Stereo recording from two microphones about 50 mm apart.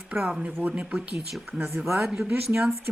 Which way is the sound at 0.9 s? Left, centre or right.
Right.